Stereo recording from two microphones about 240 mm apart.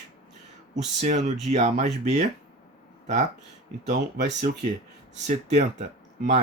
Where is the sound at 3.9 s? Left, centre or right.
Right.